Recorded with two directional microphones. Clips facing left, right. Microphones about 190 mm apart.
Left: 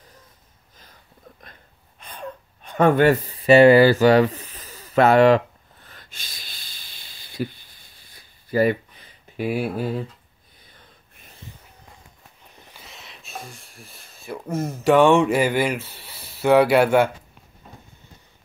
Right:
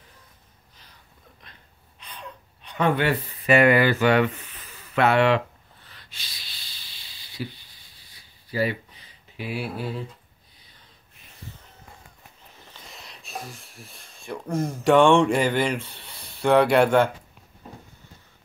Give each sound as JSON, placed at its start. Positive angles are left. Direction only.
{"t": 2.0, "sound": "gasp", "side_deg": 50}
{"t": 3.3, "sound": "speech", "side_deg": 30}
{"t": 5.9, "sound": "a sound", "side_deg": 50}
{"t": 12.7, "sound": "speech", "side_deg": 0}